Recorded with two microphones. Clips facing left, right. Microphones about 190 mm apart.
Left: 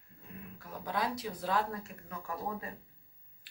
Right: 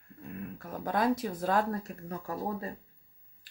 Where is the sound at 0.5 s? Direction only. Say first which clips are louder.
Right 5 dB; 50° right (ahead or behind).